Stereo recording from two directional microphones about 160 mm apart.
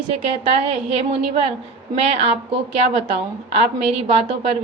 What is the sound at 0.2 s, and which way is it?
A woman's voice, 40° right (ahead or behind).